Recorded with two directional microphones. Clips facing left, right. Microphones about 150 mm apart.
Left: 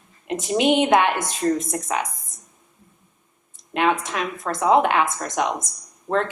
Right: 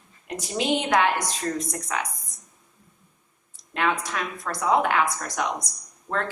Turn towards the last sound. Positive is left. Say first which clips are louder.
# left 6 dB
turn(degrees=60)  # may be behind; listen again after turning